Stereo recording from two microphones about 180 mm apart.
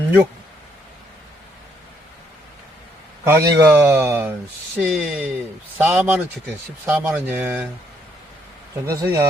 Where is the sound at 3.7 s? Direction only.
10° right (ahead or behind).